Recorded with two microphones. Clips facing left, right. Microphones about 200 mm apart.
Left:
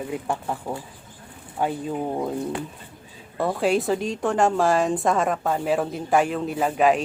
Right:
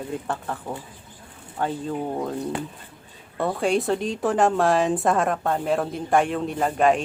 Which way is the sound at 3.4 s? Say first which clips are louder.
Left 1 dB; centre (ahead or behind).